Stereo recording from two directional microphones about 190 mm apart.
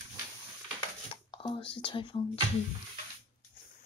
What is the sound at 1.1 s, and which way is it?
Whispering, 25° left (ahead or behind).